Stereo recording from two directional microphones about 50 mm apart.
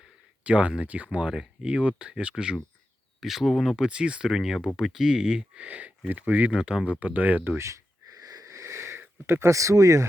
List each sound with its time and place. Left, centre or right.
0.4 s speech: right
3.2 s speech: centre
3.8 s speech: centre
4.3 s speech: centre; by 6.6 s right
6.6 s speech: centre
7.0 s speech: right
8.4 s wheeze: right
9.0 s a sound: right
9.5 s speech: right